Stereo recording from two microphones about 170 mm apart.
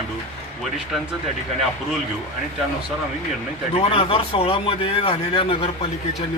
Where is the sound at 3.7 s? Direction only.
35° left (ahead or behind).